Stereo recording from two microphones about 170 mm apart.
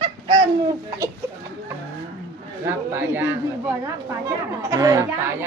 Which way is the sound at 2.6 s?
10° right (ahead or behind).